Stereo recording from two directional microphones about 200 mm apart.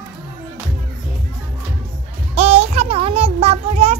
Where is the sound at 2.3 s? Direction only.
35° right (ahead or behind).